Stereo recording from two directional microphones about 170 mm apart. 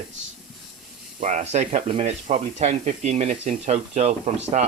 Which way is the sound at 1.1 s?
45° right (ahead or behind).